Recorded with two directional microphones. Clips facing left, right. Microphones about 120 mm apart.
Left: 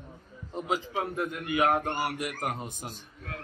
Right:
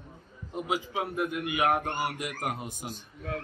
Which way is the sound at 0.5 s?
10° right (ahead or behind).